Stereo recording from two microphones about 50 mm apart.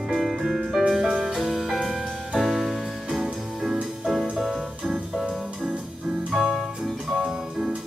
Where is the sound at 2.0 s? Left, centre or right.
Centre.